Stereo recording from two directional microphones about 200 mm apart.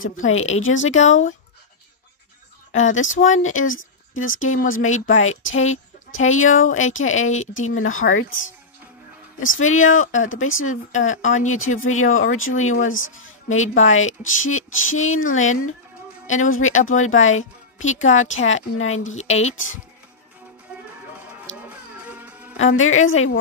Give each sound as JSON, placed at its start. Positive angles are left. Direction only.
{"t": 0.0, "sound": "speech", "side_deg": 85}
{"t": 0.9, "sound": "speech", "side_deg": 35}
{"t": 2.7, "sound": "speech", "side_deg": 75}
{"t": 3.1, "sound": "speech", "side_deg": 40}
{"t": 3.4, "sound": "a woman's voice", "side_deg": 85}
{"t": 9.4, "sound": "a woman's voice", "side_deg": 90}
{"t": 9.8, "sound": "speech", "side_deg": 40}
{"t": 10.1, "sound": "a woman's voice", "side_deg": 85}
{"t": 13.8, "sound": "a woman's voice", "side_deg": 80}
{"t": 22.0, "sound": "a sound", "side_deg": -10}
{"t": 22.8, "sound": "a woman's voice", "side_deg": 90}